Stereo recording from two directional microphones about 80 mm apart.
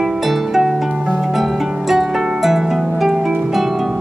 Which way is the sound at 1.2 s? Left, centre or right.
Centre.